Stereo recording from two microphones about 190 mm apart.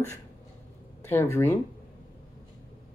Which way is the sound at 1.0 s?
10° left (ahead or behind).